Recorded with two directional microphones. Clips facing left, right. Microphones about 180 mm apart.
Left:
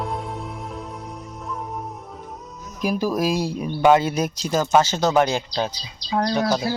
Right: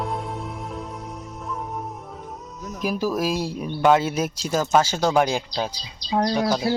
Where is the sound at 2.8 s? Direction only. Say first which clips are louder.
Left 2 dB; centre (ahead or behind).